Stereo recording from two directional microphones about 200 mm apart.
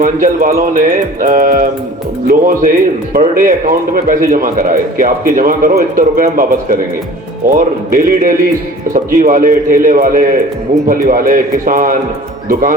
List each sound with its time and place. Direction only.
0.0 s speech: 45° right (ahead or behind)